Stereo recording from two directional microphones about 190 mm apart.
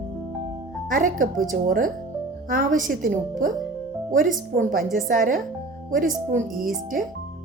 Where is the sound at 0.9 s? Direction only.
45° right (ahead or behind).